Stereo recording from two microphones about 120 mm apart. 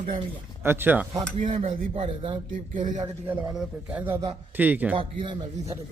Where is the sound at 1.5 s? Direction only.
50° right (ahead or behind).